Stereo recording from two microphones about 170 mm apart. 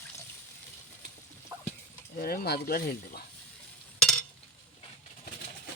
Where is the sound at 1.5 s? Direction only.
20° right (ahead or behind).